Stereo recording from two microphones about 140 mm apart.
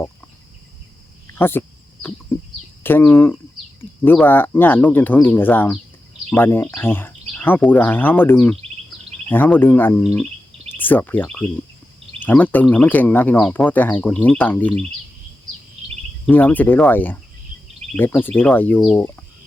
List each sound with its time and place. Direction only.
1.4 s a sound: 15° left (ahead or behind)
2.8 s speech: 15° left (ahead or behind)
16.3 s speech: 15° left (ahead or behind)